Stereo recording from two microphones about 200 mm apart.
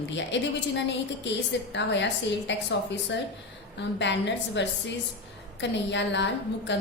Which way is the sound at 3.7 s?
60° left (ahead or behind).